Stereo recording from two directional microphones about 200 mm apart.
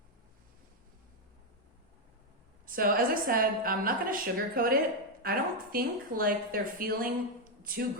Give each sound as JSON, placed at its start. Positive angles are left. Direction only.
{"t": 2.6, "sound": "a woman's voice", "side_deg": -45}